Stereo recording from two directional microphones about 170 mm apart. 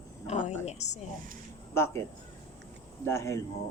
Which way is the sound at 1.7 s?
15° left (ahead or behind).